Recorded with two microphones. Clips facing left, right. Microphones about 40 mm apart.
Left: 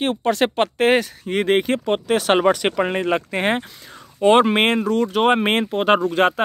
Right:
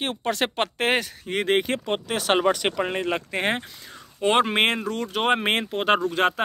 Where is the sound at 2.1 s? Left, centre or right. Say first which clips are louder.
Left 5 dB; left.